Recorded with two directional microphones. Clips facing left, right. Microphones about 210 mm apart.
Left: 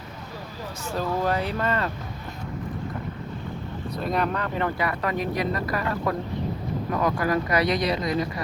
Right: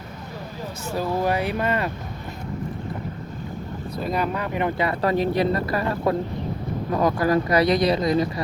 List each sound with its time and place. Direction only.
0.9 s speech: 10° right (ahead or behind)
4.0 s speech: centre (ahead or behind)
4.4 s speech: 15° right (ahead or behind)
4.9 s speech: 30° right (ahead or behind)